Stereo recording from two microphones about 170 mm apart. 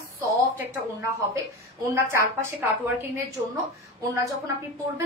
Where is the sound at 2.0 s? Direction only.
15° right (ahead or behind).